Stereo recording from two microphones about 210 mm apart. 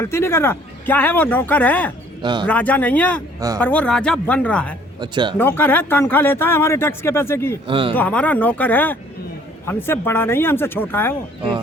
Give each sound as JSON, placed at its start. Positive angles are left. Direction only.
{"t": 0.0, "sound": "speech", "side_deg": 10}
{"t": 2.2, "sound": "speech", "side_deg": -20}
{"t": 2.5, "sound": "speech", "side_deg": 5}
{"t": 4.9, "sound": "speech", "side_deg": -20}
{"t": 5.4, "sound": "speech", "side_deg": 10}
{"t": 7.7, "sound": "speech", "side_deg": -25}
{"t": 7.9, "sound": "speech", "side_deg": 5}